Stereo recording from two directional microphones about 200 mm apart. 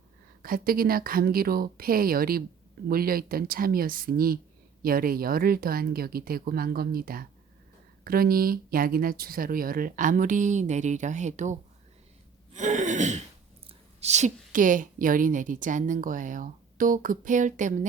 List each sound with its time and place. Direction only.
0.4 s speech: 45° right (ahead or behind)
12.5 s gasp: 35° right (ahead or behind)
13.7 s a woman's voice: 35° right (ahead or behind)